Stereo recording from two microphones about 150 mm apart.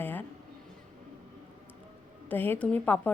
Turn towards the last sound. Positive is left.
turn(degrees=10)  # may be behind; listen again after turning